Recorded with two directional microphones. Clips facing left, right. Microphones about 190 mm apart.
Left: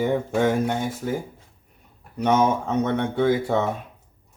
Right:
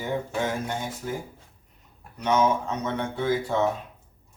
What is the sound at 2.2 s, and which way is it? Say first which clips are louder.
Speech: left 3 dB; 55° left (ahead or behind).